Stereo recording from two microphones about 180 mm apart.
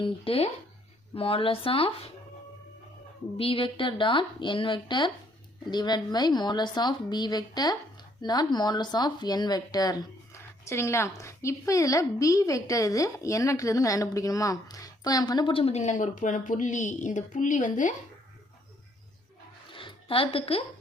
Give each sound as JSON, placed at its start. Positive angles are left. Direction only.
{"t": 0.0, "sound": "speech", "side_deg": 30}
{"t": 3.3, "sound": "speech", "side_deg": 30}
{"t": 19.7, "sound": "a sound", "side_deg": 30}